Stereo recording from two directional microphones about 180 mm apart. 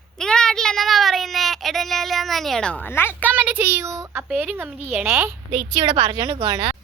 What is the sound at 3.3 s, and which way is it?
A woman's voice, 10° right (ahead or behind).